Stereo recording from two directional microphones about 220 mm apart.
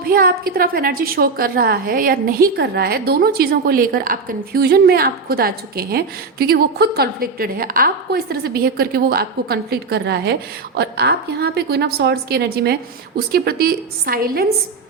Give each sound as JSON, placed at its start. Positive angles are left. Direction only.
{"t": 0.1, "sound": "a woman's voice", "side_deg": -40}